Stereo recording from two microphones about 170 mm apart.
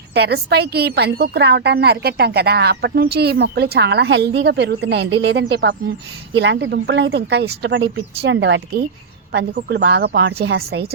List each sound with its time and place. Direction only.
0.1 s a woman's voice: 70° right (ahead or behind)
8.2 s speech: 90° right
9.3 s a woman's voice: 75° right (ahead or behind)